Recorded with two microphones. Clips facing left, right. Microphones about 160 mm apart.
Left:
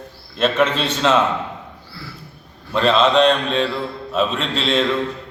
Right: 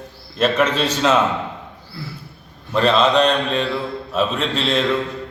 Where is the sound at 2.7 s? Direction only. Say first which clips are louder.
Even; centre (ahead or behind).